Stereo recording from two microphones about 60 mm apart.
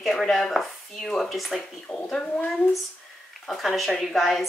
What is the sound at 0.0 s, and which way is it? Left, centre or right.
Speech, centre.